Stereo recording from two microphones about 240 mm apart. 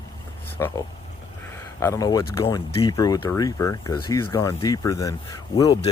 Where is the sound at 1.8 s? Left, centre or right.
Centre.